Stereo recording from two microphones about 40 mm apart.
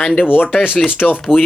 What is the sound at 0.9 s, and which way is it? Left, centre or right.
Speech, left.